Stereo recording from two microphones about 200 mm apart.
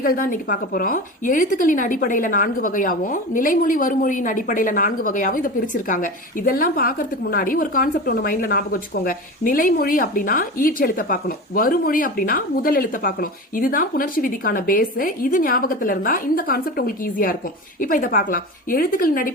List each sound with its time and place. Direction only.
0.0 s a woman's voice: 45° left (ahead or behind)